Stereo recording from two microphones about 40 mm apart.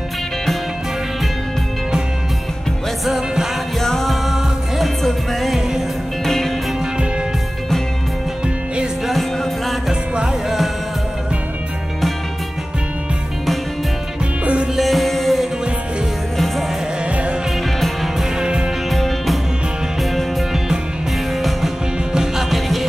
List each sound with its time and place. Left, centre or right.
3.1 s music: centre
3.8 s music: centre
14.4 s music: right
14.8 s music: centre
17.7 s music: centre
21.4 s music: centre
22.1 s music: centre